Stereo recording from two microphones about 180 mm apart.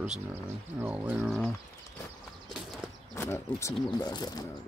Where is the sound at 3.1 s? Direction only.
15° left (ahead or behind).